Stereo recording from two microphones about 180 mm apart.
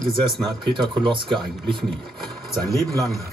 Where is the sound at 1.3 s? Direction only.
5° left (ahead or behind).